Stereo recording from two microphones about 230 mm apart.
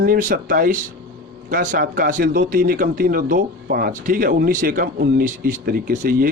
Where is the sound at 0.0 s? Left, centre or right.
Right.